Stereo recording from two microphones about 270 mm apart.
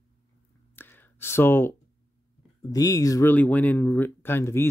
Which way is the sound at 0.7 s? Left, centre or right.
Centre.